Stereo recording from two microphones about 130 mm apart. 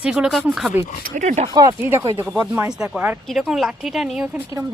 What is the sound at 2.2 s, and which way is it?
A woman's voice, 5° right (ahead or behind).